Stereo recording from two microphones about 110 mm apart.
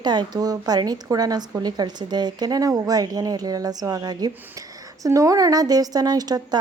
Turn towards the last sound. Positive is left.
turn(degrees=-35)  # may be behind; listen again after turning